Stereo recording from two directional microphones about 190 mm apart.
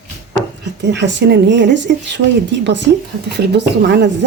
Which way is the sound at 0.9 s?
65° right (ahead or behind).